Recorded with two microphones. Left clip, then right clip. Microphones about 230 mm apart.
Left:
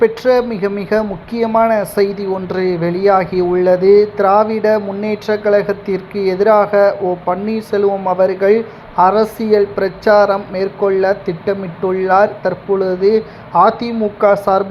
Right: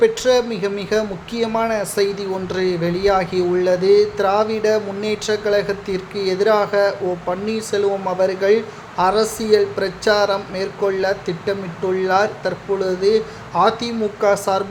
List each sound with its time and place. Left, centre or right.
0.0 s speech: centre